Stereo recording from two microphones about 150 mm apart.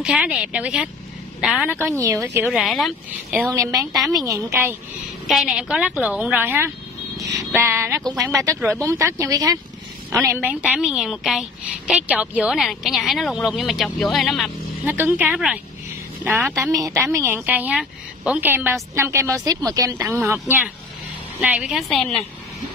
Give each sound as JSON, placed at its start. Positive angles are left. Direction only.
{"t": 0.0, "sound": "a woman's voice", "side_deg": -5}
{"t": 2.4, "sound": "a woman's voice", "side_deg": 0}
{"t": 3.5, "sound": "a woman's voice", "side_deg": -20}
{"t": 5.3, "sound": "a woman's voice", "side_deg": -5}
{"t": 14.9, "sound": "a woman's voice", "side_deg": -15}
{"t": 20.4, "sound": "a woman's voice", "side_deg": -10}